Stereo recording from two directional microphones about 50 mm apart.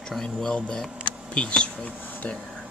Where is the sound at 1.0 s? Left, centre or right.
Left.